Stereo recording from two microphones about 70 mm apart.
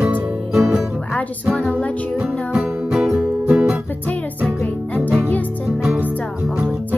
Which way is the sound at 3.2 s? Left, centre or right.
Right.